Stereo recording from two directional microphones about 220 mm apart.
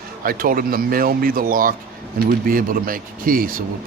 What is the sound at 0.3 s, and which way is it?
A man's voice, 40° right (ahead or behind).